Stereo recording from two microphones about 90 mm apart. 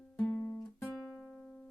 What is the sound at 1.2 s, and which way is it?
Music, 5° left (ahead or behind).